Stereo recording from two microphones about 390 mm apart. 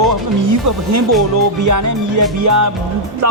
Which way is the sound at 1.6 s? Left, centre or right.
Right.